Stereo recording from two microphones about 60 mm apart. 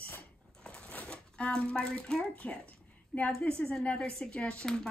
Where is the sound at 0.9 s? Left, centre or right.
Left.